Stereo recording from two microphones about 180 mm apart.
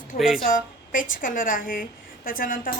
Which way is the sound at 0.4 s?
50° left (ahead or behind).